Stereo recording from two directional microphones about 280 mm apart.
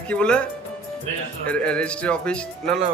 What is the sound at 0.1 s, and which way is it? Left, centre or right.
Speech, centre.